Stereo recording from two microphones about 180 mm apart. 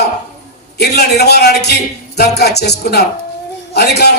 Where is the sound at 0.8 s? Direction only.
65° left (ahead or behind).